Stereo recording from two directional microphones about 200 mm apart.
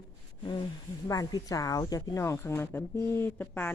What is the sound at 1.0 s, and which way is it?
Speech, 15° left (ahead or behind).